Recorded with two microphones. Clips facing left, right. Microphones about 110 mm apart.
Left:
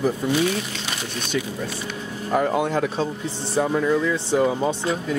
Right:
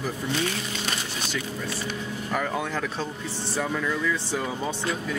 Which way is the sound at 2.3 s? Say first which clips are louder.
Left 8 dB; 30° left (ahead or behind).